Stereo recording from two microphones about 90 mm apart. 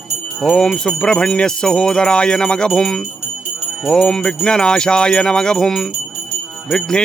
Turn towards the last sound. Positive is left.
turn(degrees=5)  # may be behind; listen again after turning